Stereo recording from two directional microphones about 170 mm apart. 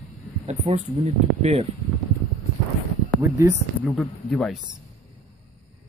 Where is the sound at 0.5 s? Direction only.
40° right (ahead or behind).